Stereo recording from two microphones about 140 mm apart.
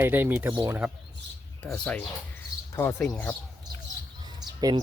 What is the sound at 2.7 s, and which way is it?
Speech, 20° left (ahead or behind).